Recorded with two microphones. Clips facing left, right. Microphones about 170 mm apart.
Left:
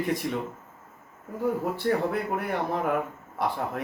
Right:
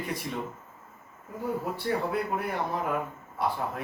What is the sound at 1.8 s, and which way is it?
Speech, 50° left (ahead or behind).